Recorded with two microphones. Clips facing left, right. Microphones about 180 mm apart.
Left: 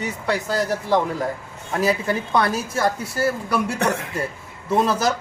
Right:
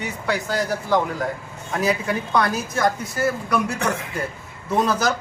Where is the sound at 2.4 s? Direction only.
30° left (ahead or behind).